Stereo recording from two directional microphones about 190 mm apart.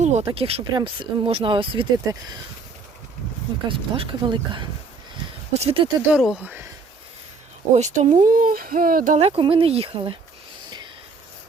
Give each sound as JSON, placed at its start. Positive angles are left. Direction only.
{"t": 0.0, "sound": "speech", "side_deg": -35}
{"t": 3.7, "sound": "speech", "side_deg": -30}
{"t": 6.0, "sound": "speech", "side_deg": -5}
{"t": 7.7, "sound": "speech", "side_deg": -40}
{"t": 9.1, "sound": "speech", "side_deg": -30}